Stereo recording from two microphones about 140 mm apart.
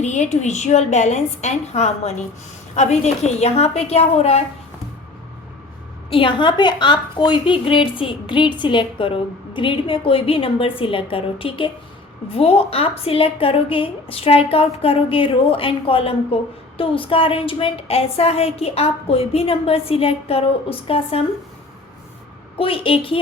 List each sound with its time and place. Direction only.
0.0 s a woman's voice: 55° left (ahead or behind)
6.1 s a woman's voice: 40° left (ahead or behind)
22.5 s a woman's voice: 40° left (ahead or behind)